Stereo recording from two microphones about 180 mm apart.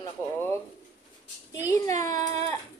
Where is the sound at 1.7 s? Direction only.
15° left (ahead or behind).